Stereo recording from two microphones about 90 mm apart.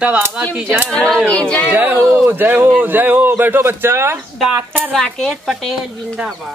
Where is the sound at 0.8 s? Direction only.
5° left (ahead or behind).